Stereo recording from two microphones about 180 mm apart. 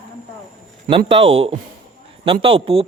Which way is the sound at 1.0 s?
35° right (ahead or behind).